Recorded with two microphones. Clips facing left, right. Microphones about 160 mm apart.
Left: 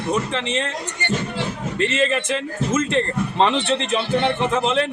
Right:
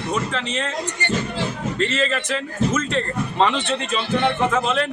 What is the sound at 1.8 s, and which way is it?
Speech, 20° left (ahead or behind).